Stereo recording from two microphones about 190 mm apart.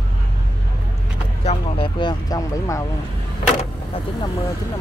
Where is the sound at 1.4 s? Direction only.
25° left (ahead or behind).